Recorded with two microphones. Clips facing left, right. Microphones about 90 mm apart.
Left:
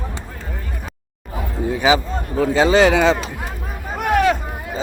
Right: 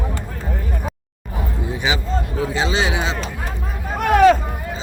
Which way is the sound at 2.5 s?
50° left (ahead or behind).